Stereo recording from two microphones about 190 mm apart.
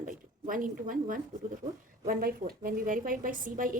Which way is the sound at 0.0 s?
45° right (ahead or behind).